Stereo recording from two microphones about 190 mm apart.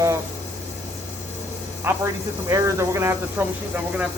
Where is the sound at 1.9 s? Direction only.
10° right (ahead or behind).